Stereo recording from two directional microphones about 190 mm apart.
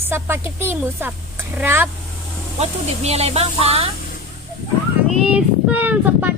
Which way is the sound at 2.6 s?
35° right (ahead or behind).